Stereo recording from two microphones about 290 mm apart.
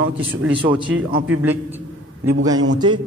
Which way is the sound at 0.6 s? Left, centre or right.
Centre.